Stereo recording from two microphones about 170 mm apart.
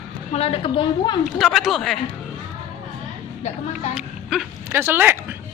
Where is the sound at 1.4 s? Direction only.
Centre (ahead or behind).